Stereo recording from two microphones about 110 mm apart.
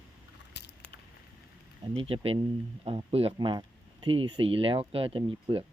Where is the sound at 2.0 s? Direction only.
60° right (ahead or behind).